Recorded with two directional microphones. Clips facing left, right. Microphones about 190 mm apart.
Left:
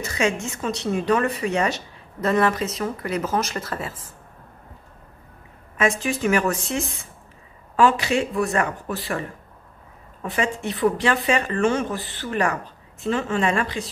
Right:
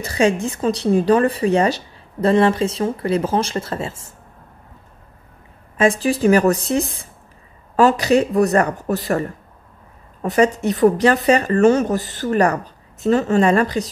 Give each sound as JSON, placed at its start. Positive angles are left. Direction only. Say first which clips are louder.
{"t": 0.0, "sound": "speech", "louder": "right 6 dB", "side_deg": -35}
{"t": 5.8, "sound": "speech", "louder": "right 6 dB", "side_deg": -35}
{"t": 10.2, "sound": "speech", "louder": "right 9 dB", "side_deg": -40}